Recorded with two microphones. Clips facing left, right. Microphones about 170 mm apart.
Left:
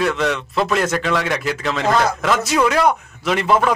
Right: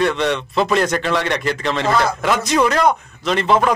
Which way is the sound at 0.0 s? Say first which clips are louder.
Right 1 dB; centre (ahead or behind).